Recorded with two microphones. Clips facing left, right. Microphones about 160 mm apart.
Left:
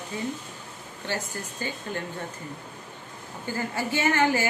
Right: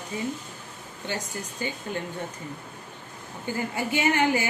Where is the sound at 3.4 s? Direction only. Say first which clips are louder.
Right 1 dB; 15° right (ahead or behind).